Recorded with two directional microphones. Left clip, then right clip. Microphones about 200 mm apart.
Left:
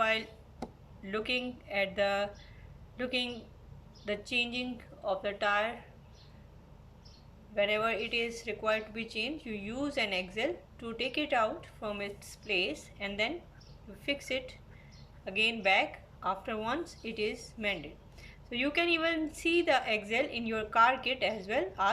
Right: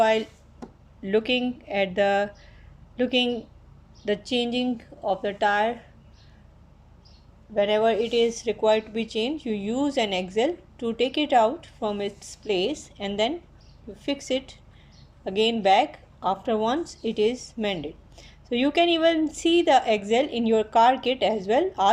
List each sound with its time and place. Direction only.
0.0 s speech: 30° right (ahead or behind)
7.5 s speech: 30° right (ahead or behind)